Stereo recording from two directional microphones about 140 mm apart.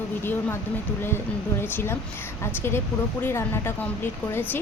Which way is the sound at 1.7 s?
15° left (ahead or behind).